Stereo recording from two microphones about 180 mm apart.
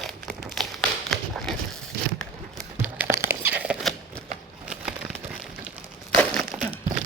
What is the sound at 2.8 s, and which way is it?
Crumpling, 10° right (ahead or behind).